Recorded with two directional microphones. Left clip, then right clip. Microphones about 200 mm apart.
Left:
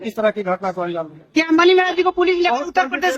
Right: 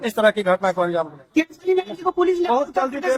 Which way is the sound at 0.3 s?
5° right (ahead or behind).